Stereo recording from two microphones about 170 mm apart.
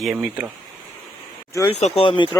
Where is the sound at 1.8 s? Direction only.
40° left (ahead or behind).